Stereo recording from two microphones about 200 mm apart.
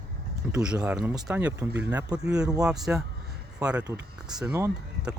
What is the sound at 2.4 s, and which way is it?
Speech, 20° right (ahead or behind).